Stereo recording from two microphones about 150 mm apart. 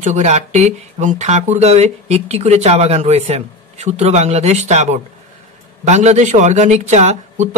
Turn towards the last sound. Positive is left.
turn(degrees=-50)  # may be behind; listen again after turning